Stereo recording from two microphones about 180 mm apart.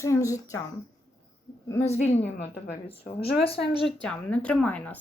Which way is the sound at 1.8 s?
40° left (ahead or behind).